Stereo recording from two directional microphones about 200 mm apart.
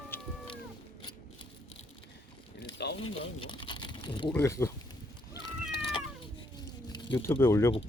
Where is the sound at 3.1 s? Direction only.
25° left (ahead or behind).